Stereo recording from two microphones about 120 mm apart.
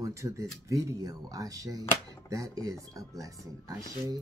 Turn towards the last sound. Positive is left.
turn(degrees=-25)  # may be behind; listen again after turning